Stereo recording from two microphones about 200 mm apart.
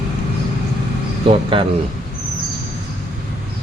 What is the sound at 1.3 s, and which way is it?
Speech, 25° right (ahead or behind).